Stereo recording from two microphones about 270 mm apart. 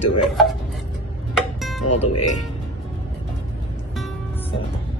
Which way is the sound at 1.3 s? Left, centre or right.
Centre.